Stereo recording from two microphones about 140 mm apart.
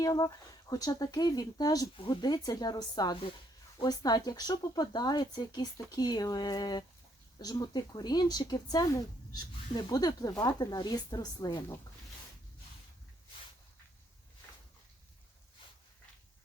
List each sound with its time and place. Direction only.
0.0 s speech: 25° left (ahead or behind)